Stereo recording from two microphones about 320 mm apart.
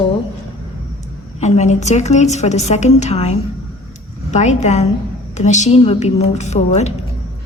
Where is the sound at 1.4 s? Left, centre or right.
Left.